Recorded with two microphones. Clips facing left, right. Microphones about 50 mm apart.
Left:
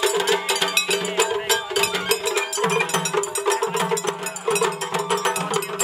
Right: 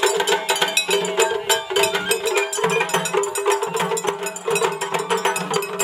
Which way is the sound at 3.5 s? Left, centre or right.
Centre.